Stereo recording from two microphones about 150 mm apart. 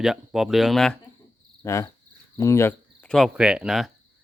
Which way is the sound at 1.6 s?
20° left (ahead or behind).